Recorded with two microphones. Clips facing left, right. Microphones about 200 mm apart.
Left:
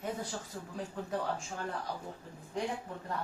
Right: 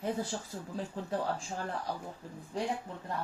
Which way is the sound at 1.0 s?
30° right (ahead or behind).